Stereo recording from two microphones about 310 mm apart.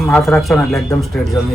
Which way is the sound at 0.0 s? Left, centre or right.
Centre.